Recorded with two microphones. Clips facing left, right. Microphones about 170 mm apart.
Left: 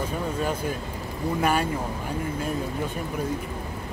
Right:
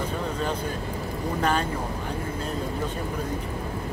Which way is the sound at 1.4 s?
10° left (ahead or behind).